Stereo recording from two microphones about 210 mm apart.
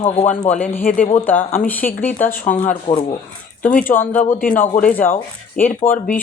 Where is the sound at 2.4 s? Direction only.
40° left (ahead or behind).